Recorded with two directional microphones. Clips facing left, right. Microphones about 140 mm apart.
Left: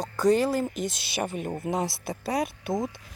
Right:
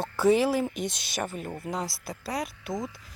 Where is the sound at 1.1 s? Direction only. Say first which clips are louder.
Left 3 dB; 15° left (ahead or behind).